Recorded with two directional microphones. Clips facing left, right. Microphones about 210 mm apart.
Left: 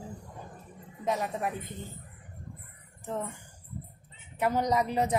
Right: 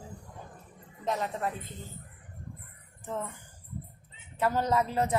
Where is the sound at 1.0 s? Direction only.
10° left (ahead or behind).